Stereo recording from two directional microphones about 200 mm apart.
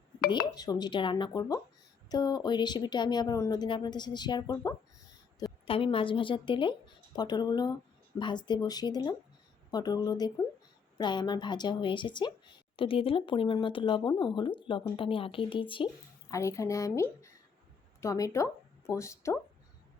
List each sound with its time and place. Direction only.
0.4 s a woman's voice: 20° left (ahead or behind)